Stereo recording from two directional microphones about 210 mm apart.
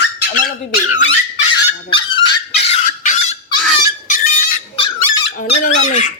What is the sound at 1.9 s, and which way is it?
Honk, 25° left (ahead or behind).